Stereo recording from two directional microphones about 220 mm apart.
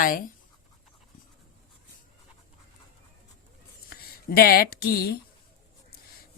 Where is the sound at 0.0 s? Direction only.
40° left (ahead or behind).